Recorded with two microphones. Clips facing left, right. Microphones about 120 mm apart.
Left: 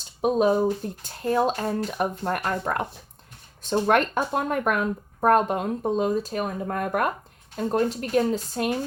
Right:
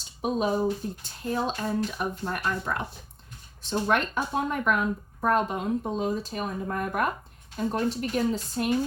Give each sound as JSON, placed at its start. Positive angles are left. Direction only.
{"t": 0.2, "sound": "speech", "side_deg": 45}